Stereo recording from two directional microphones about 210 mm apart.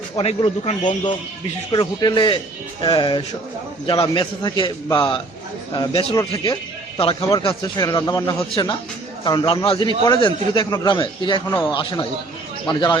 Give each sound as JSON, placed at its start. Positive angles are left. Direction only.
{"t": 0.2, "sound": "speech", "side_deg": 25}